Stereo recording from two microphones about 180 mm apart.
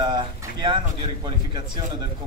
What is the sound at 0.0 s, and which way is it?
Speech, 25° right (ahead or behind).